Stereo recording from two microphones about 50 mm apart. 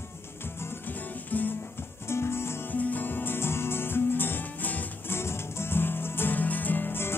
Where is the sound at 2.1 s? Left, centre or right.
Left.